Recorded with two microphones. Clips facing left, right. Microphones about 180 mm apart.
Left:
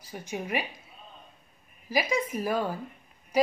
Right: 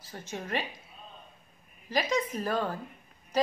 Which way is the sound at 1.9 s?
10° left (ahead or behind).